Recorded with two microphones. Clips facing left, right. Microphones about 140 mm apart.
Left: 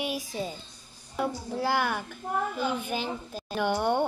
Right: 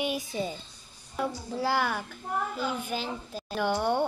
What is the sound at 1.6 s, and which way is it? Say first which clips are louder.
Speech: even; centre (ahead or behind).